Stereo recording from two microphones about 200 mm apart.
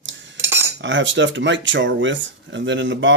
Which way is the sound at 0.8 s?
65° right (ahead or behind).